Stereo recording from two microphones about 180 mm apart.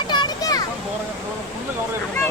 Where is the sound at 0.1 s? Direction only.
20° left (ahead or behind).